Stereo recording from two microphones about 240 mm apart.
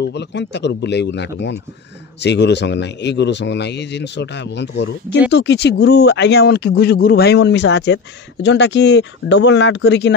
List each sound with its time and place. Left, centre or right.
0.0 s speech: left